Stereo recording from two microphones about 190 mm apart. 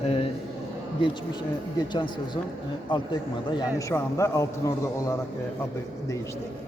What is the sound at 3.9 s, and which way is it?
A man's voice, 15° left (ahead or behind).